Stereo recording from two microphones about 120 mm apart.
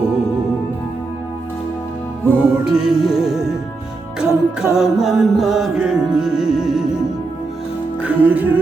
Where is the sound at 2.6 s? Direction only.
5° right (ahead or behind).